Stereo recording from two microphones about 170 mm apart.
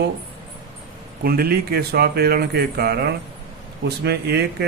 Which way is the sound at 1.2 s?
65° right (ahead or behind).